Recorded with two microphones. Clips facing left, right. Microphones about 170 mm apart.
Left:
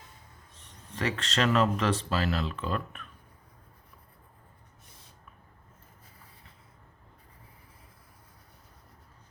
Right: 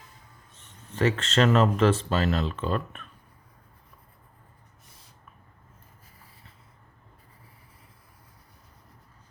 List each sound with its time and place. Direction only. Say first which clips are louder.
0.9 s speech: right 6 dB; 45° right (ahead or behind)